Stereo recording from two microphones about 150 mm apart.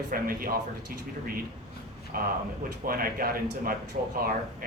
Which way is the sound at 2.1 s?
70° right (ahead or behind).